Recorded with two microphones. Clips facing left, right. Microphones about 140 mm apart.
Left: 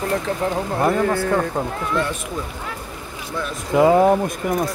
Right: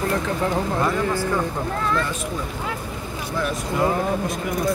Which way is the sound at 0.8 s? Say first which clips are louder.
Left 4 dB; 50° left (ahead or behind).